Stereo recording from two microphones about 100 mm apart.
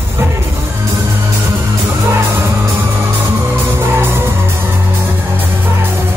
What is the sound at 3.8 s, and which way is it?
Music, 25° right (ahead or behind).